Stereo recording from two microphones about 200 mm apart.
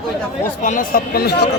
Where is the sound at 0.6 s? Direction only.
45° left (ahead or behind).